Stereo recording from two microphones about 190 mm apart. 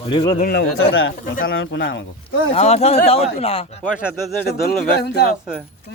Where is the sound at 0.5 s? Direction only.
65° left (ahead or behind); by 1.1 s 90° left.